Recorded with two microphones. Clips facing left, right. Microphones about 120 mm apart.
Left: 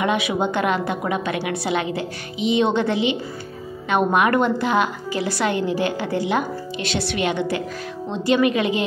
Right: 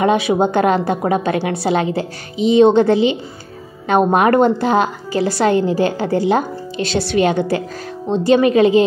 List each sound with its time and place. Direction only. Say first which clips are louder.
0.0 s a woman's voice: right 6 dB; 35° right (ahead or behind)